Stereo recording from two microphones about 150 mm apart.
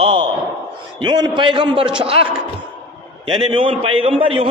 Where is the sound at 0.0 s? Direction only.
35° right (ahead or behind).